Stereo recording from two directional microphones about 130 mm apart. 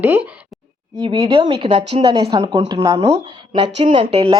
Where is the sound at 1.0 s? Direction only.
40° right (ahead or behind).